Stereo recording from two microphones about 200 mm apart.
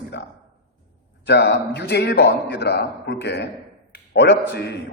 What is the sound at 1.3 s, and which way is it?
A man's voice, 60° left (ahead or behind).